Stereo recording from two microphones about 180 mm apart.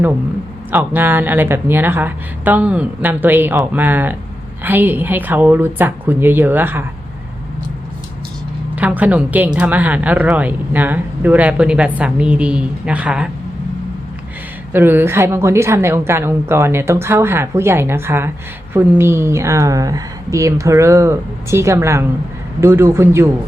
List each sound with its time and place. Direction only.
0.7 s a woman's voice: 10° right (ahead or behind)
8.7 s a woman's voice: 10° right (ahead or behind)
14.7 s a woman's voice: 10° right (ahead or behind)